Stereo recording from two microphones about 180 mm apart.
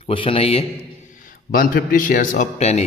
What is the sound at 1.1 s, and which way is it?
A man's voice, 50° left (ahead or behind).